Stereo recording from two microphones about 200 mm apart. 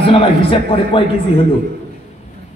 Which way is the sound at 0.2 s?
30° left (ahead or behind).